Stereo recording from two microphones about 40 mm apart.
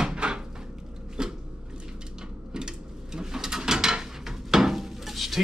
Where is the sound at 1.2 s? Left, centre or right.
Centre.